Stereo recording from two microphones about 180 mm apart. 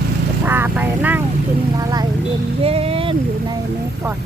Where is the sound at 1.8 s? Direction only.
20° right (ahead or behind).